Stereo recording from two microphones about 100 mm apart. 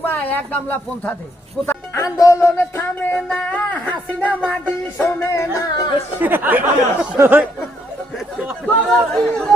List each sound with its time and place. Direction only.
0.0 s a woman's voice: 20° left (ahead or behind)
1.6 s music: 25° left (ahead or behind)
3.0 s speech: 10° left (ahead or behind)
4.5 s music: 20° left (ahead or behind)
5.5 s speech: 40° left (ahead or behind)
6.1 s speech: 20° right (ahead or behind)
7.2 s a sound: 20° right (ahead or behind)
8.6 s speech: 5° left (ahead or behind)